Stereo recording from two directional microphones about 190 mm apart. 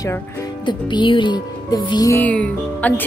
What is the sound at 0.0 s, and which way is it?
Speech, 20° left (ahead or behind).